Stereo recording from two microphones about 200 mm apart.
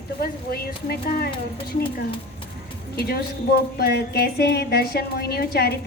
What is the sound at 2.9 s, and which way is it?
A woman's voice, 50° left (ahead or behind).